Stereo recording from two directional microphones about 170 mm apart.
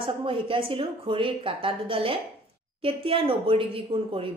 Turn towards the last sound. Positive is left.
turn(degrees=-35)  # may be behind; listen again after turning